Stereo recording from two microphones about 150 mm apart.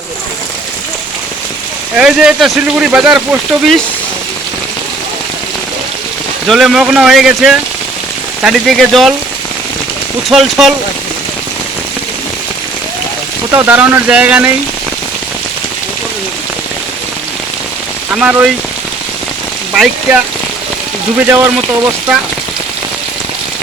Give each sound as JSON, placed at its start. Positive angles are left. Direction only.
{"t": 2.0, "sound": "speech", "side_deg": -5}
{"t": 6.5, "sound": "speech", "side_deg": 0}
{"t": 10.2, "sound": "speech", "side_deg": 0}
{"t": 13.5, "sound": "speech", "side_deg": -15}
{"t": 18.1, "sound": "speech", "side_deg": -10}
{"t": 19.7, "sound": "speech", "side_deg": -5}
{"t": 21.2, "sound": "speech", "side_deg": -15}